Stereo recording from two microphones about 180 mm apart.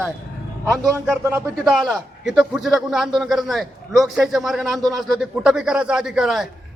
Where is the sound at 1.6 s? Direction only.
Centre (ahead or behind).